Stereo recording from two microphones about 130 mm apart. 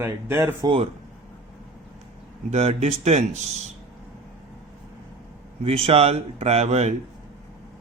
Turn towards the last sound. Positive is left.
turn(degrees=-55)  # may be behind; listen again after turning